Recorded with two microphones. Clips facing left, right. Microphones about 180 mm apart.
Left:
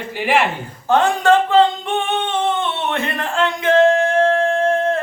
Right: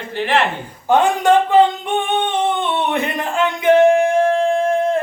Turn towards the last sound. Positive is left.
turn(degrees=-15)  # may be behind; listen again after turning